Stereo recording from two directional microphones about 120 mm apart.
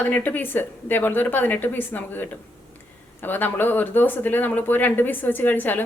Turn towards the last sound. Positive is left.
turn(degrees=15)  # may be behind; listen again after turning